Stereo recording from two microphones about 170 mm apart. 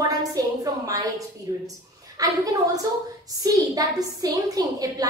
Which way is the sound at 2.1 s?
20° right (ahead or behind).